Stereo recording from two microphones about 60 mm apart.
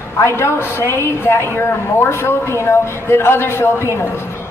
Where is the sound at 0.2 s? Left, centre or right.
Left.